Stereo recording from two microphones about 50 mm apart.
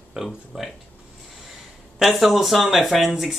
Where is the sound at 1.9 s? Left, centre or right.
Centre.